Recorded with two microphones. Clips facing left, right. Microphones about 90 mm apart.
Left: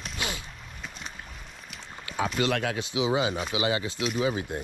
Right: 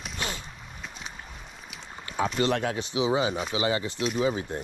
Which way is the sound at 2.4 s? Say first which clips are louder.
Right 1 dB; 30° right (ahead or behind).